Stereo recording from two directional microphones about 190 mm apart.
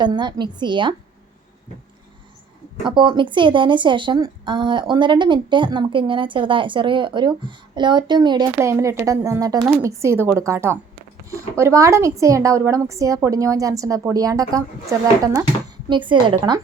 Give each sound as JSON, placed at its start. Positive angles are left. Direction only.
{"t": 0.0, "sound": "speech", "side_deg": -25}
{"t": 2.8, "sound": "a woman's voice", "side_deg": -25}